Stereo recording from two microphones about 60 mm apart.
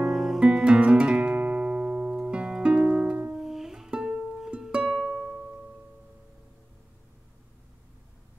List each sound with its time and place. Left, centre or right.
0.0 s music: centre
0.4 s music: centre
3.3 s music: centre
4.8 s music: centre